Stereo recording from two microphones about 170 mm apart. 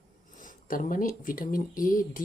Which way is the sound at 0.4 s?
50° left (ahead or behind).